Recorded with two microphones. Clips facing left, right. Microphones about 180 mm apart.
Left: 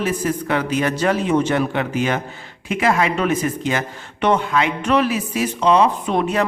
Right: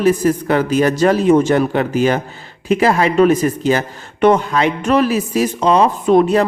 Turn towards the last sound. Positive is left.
turn(degrees=-40)  # may be behind; listen again after turning